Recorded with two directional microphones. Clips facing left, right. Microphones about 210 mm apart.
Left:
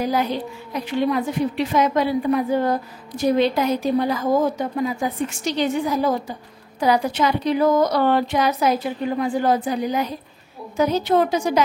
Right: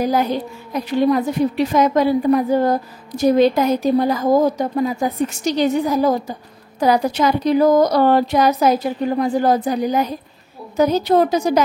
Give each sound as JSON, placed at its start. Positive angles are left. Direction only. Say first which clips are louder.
{"t": 0.0, "sound": "a woman's voice", "louder": "right 3 dB", "side_deg": -45}